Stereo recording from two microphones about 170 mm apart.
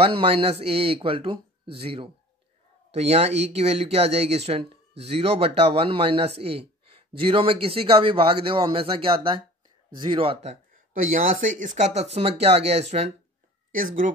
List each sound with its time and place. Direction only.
0.0 s speech: 35° right (ahead or behind)
13.7 s speech: 50° right (ahead or behind)